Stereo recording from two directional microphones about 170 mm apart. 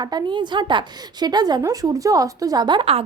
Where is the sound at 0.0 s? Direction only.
25° right (ahead or behind).